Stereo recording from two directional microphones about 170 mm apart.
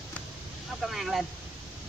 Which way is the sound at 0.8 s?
Centre (ahead or behind).